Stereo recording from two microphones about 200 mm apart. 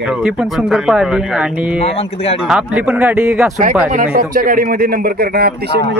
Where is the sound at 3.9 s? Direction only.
45° right (ahead or behind).